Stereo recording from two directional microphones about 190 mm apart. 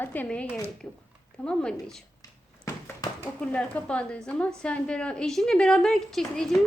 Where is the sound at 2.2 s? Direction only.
20° left (ahead or behind).